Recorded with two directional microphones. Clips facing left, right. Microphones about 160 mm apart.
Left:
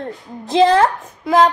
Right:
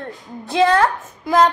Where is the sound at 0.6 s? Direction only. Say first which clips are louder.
Left 3 dB; 30° left (ahead or behind).